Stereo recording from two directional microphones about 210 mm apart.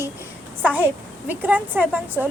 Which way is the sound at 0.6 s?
10° right (ahead or behind).